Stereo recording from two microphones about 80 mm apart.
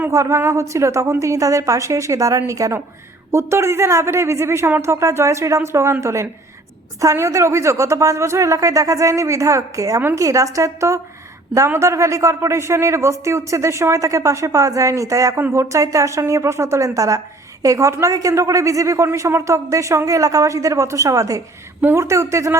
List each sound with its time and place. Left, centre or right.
0.1 s a man's voice: right
10.0 s a woman's voice: right
10.2 s a man's voice: right